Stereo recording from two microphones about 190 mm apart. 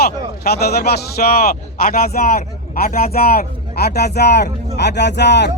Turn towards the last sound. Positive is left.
turn(degrees=65)  # may be behind; listen again after turning